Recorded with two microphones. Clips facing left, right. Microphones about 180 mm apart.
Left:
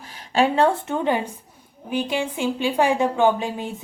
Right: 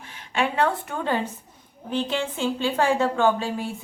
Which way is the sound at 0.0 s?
35° left (ahead or behind).